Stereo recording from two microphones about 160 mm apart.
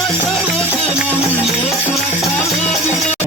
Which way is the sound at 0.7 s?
10° right (ahead or behind).